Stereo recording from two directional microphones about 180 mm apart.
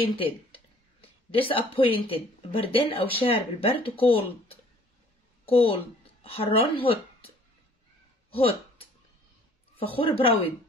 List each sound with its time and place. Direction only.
0.0 s a woman's voice: 30° left (ahead or behind)
8.3 s a sound: 30° left (ahead or behind)
9.8 s speech: 30° left (ahead or behind)